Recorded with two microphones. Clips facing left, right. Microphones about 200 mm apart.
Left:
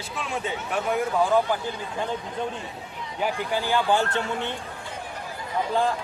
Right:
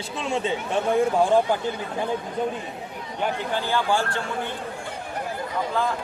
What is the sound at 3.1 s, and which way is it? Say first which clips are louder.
A man's voice: even; 10° left (ahead or behind).